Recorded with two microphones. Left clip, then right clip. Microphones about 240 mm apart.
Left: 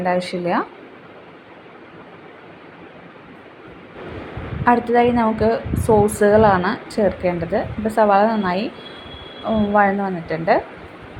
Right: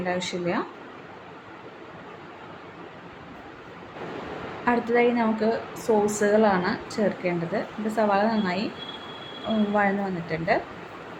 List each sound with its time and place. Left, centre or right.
0.0 s a woman's voice: centre
4.6 s a woman's voice: centre
9.7 s a woman's voice: centre